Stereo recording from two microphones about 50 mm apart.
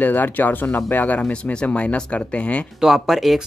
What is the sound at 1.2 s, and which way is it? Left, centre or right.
Speech, left.